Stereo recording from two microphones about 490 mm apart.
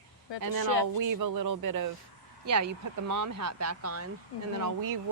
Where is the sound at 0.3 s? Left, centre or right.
Left.